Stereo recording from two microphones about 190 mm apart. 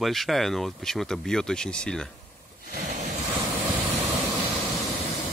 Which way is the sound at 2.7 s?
40° right (ahead or behind).